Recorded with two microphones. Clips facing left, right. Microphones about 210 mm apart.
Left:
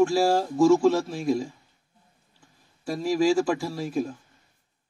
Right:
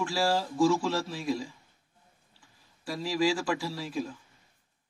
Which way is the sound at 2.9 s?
45° left (ahead or behind).